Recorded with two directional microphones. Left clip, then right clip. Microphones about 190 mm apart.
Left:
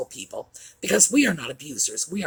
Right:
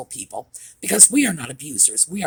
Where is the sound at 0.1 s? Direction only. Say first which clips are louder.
Right 3 dB; 50° right (ahead or behind).